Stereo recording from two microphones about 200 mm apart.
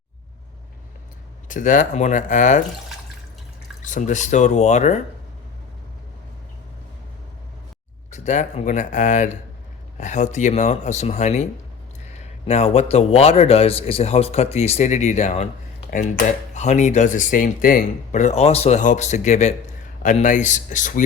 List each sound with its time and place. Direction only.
1.5 s speech: 40° left (ahead or behind)
3.8 s speech: 40° left (ahead or behind)
8.1 s speech: 35° left (ahead or behind)